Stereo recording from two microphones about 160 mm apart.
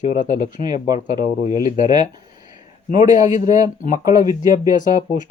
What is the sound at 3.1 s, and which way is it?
Speech, 50° left (ahead or behind).